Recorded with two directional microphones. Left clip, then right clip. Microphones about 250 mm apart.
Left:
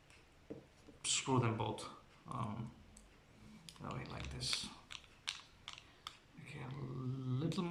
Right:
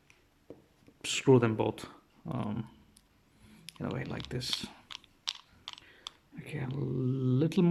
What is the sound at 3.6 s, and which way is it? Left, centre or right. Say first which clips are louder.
Speech: right 10 dB; right.